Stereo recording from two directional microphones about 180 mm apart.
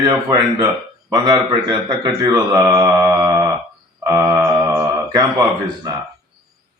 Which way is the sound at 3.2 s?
20° right (ahead or behind).